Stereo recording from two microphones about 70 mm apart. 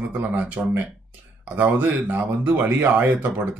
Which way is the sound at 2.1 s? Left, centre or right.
Right.